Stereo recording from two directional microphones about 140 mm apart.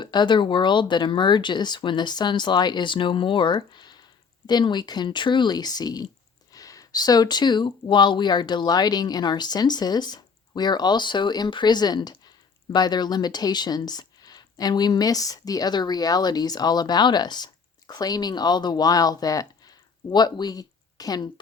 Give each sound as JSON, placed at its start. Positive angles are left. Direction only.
{"t": 0.0, "sound": "speech", "side_deg": 30}